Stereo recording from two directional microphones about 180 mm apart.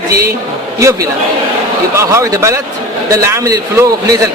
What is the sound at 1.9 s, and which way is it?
A man's voice, 15° right (ahead or behind).